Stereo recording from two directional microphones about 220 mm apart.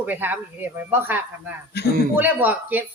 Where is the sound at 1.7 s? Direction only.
50° left (ahead or behind).